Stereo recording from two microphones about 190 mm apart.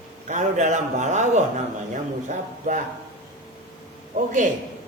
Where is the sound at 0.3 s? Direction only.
40° right (ahead or behind).